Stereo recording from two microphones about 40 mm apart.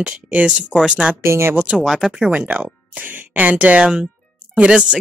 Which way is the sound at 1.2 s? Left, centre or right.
Right.